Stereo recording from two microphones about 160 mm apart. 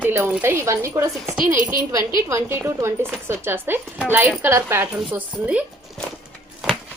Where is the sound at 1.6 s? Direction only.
55° right (ahead or behind).